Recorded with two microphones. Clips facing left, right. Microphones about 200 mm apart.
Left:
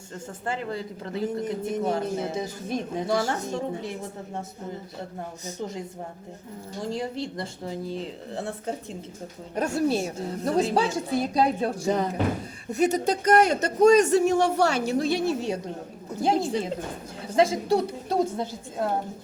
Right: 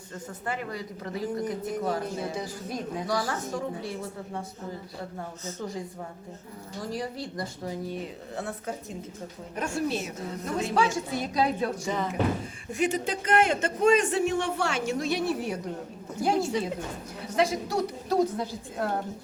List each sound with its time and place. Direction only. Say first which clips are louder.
0.4 s speech: left 3 dB; 25° left (ahead or behind)
5.5 s speech: left 1 dB; 20° left (ahead or behind)
6.8 s speech: left 4 dB; 25° left (ahead or behind)
9.6 s a man's voice: left 5 dB; 40° left (ahead or behind)